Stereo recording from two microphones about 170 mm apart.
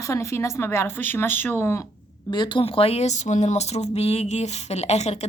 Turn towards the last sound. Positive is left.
turn(degrees=40)  # may be behind; listen again after turning